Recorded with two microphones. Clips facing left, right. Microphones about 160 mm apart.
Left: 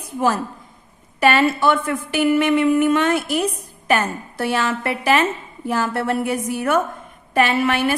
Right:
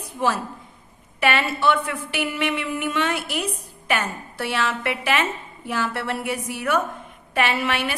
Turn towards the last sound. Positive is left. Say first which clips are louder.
# left 5 dB
turn(degrees=45)  # may be behind; listen again after turning